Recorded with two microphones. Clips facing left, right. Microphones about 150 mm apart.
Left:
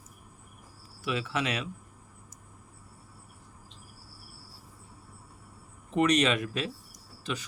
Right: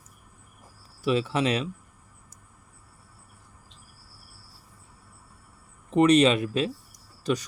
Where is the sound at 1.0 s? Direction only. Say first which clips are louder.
Right 7 dB; 35° right (ahead or behind).